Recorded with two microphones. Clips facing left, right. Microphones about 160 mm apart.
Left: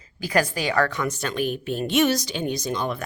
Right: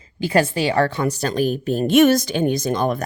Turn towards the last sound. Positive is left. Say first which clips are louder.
# right 6 dB
turn(degrees=-45)  # may be behind; listen again after turning